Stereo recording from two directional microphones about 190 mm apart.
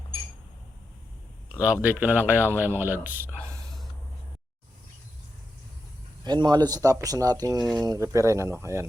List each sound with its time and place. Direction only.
1.6 s speech: 5° right (ahead or behind)
6.2 s speech: 25° right (ahead or behind)